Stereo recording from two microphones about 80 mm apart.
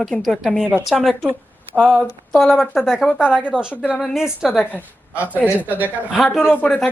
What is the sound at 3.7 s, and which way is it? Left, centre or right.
Speech, centre.